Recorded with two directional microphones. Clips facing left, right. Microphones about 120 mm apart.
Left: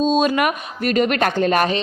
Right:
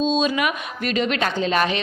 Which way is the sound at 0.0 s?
50° left (ahead or behind).